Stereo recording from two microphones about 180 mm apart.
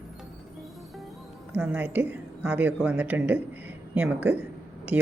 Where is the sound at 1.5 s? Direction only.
10° right (ahead or behind).